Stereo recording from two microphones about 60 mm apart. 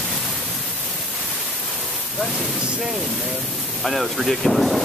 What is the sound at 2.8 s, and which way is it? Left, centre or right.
Speech, centre.